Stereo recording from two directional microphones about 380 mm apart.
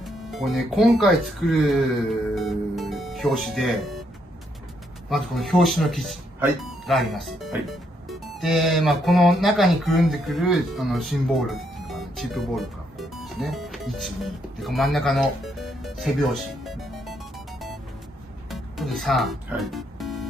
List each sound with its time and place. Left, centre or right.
0.0 s speech: centre
5.1 s speech: centre
18.5 s music: centre